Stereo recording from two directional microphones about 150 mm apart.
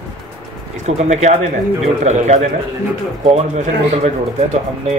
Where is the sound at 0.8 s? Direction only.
50° right (ahead or behind).